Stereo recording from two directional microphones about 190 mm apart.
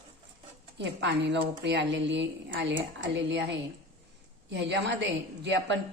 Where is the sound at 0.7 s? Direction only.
70° right (ahead or behind).